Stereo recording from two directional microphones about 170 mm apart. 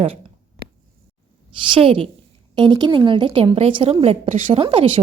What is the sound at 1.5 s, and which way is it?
A woman's voice, 30° right (ahead or behind).